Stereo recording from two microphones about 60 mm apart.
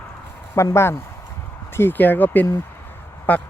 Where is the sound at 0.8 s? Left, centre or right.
Left.